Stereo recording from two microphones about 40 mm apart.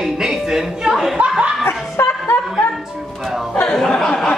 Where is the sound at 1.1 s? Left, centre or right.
Right.